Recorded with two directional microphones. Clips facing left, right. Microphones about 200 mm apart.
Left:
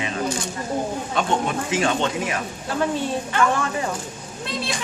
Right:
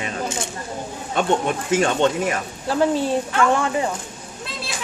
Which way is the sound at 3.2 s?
Centre (ahead or behind).